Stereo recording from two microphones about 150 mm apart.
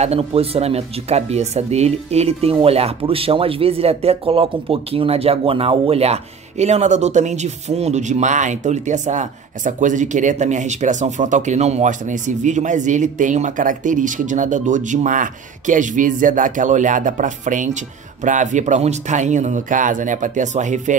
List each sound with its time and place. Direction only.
0.0 s speech: 40° right (ahead or behind)